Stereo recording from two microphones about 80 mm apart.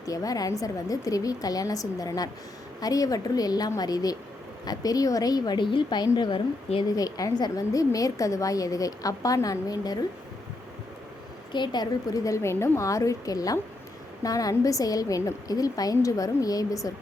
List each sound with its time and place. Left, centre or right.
0.0 s a woman's voice: left
5.5 s a woman's voice: left
6.8 s a woman's voice: left
11.5 s a woman's voice: left